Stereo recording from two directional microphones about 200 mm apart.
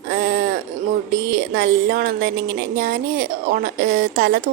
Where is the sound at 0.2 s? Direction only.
50° right (ahead or behind).